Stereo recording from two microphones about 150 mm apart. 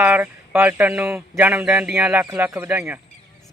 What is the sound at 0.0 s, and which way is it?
Speech, 10° right (ahead or behind).